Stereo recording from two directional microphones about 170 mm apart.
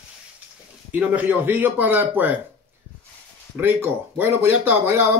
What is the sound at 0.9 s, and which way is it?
Speech, 10° right (ahead or behind).